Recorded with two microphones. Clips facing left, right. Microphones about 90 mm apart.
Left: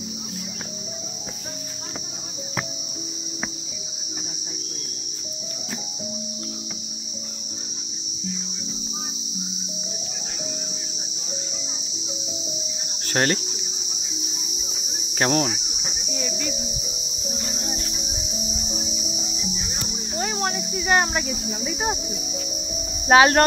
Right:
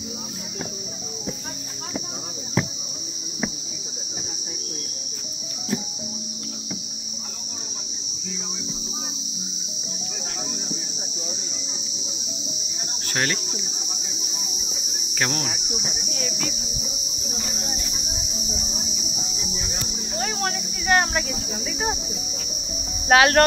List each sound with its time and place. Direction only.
13.1 s speech: 40° left (ahead or behind)
15.1 s cricket: 35° left (ahead or behind)
16.1 s cricket: 5° left (ahead or behind)
19.7 s cricket: 5° left (ahead or behind)
23.0 s speech: 20° left (ahead or behind)